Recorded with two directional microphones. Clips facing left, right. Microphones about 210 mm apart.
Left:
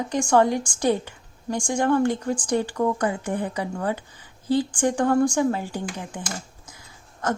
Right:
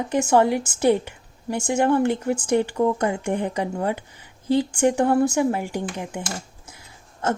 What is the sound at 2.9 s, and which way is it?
Speech, 25° right (ahead or behind).